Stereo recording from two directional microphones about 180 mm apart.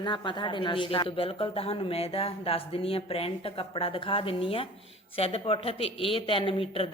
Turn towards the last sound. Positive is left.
turn(degrees=30)  # may be behind; listen again after turning